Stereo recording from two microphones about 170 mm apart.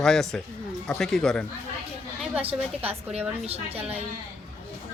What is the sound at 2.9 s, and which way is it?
Speech, 35° right (ahead or behind).